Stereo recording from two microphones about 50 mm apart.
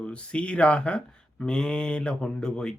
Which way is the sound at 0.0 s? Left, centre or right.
Left.